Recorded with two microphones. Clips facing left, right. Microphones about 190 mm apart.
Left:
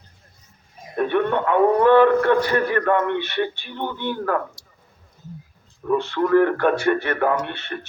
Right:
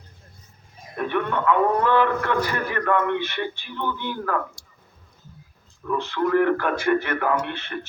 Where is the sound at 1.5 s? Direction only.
50° left (ahead or behind).